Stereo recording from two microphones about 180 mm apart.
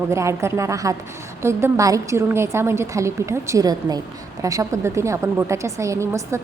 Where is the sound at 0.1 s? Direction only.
15° right (ahead or behind).